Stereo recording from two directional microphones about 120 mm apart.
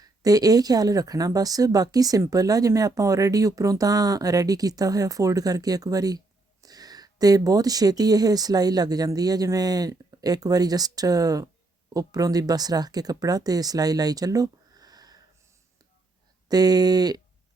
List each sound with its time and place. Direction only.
0.0 s speech: 30° right (ahead or behind)
16.5 s speech: 35° right (ahead or behind)